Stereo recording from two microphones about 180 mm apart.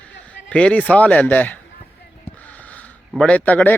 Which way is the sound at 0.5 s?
5° left (ahead or behind).